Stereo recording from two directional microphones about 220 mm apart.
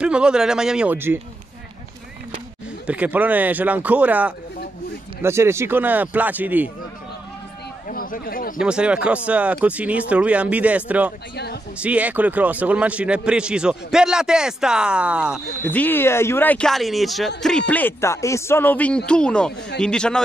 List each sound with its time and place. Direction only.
0.0 s a man's voice: 5° right (ahead or behind)
2.9 s speech: 5° right (ahead or behind)
7.9 s speech: 40° left (ahead or behind)
8.5 s a man's voice: 5° right (ahead or behind)
11.3 s speech: 50° left (ahead or behind)
11.8 s a man's voice: 5° right (ahead or behind)